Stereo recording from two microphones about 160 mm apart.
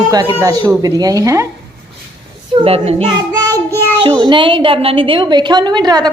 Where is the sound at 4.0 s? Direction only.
30° right (ahead or behind).